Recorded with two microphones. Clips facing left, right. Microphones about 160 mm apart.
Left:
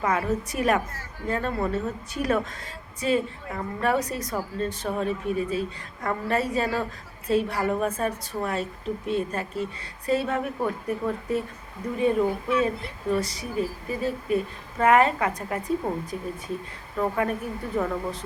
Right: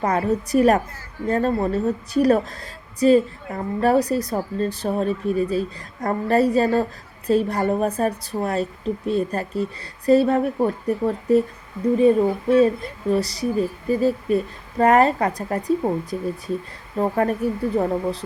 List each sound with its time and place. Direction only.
0.0 s a woman's voice: 35° right (ahead or behind)